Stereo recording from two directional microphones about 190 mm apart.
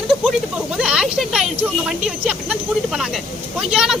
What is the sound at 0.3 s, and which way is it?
Speech, 5° right (ahead or behind).